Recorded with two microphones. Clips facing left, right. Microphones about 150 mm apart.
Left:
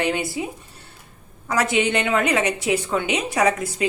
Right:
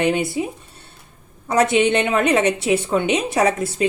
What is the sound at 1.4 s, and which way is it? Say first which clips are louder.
A woman's voice: right 5 dB; 25° right (ahead or behind).